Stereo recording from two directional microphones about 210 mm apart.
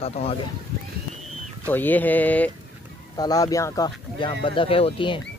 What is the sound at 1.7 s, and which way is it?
Speech, 10° left (ahead or behind).